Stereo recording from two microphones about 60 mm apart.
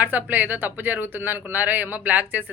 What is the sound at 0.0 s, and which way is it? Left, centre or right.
A woman's voice, right.